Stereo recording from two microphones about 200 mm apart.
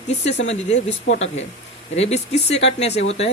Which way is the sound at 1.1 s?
70° left (ahead or behind).